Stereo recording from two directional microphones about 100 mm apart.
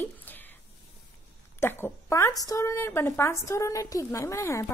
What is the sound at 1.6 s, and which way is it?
A woman's voice, 25° left (ahead or behind).